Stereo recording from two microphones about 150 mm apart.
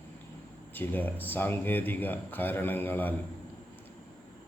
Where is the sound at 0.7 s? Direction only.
10° left (ahead or behind).